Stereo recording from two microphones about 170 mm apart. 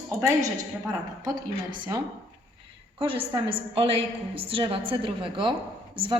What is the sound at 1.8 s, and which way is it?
A woman's voice, 25° right (ahead or behind).